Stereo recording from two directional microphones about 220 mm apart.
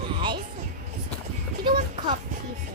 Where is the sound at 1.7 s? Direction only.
40° right (ahead or behind).